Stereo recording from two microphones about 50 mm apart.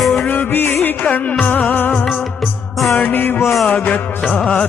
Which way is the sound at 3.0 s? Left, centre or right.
Left.